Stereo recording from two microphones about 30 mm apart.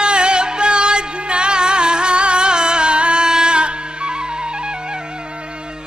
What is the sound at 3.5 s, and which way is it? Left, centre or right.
Music, right.